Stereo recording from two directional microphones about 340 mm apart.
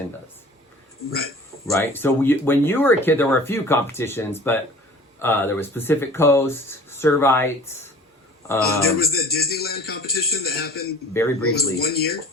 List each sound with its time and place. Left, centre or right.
1.6 s speech: centre
8.6 s speech: left
11.2 s speech: centre
11.5 s speech: left